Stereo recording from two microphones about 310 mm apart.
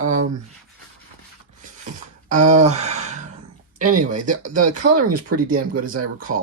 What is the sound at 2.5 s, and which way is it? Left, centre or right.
Speech, right.